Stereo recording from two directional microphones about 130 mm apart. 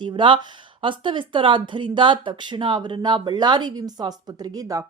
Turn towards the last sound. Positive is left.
turn(degrees=-25)  # may be behind; listen again after turning